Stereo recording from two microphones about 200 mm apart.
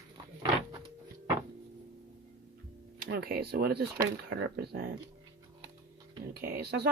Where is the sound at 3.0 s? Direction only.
50° right (ahead or behind).